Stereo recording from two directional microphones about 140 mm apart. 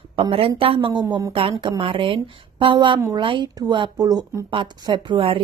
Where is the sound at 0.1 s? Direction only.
40° right (ahead or behind); by 4.5 s 25° right (ahead or behind).